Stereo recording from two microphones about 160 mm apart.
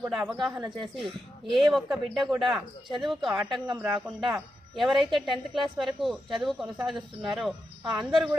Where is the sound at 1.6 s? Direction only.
Centre (ahead or behind).